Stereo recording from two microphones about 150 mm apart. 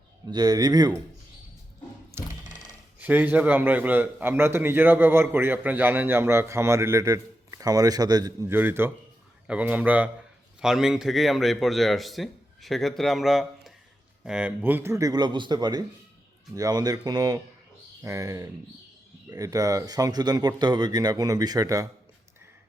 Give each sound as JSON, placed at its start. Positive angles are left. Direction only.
{"t": 0.3, "sound": "speech", "side_deg": -25}
{"t": 2.2, "sound": "a sound", "side_deg": -15}
{"t": 3.0, "sound": "a man's voice", "side_deg": -10}
{"t": 8.4, "sound": "a man's voice", "side_deg": -15}